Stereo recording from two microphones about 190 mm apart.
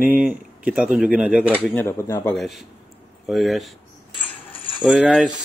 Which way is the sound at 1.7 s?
10° left (ahead or behind).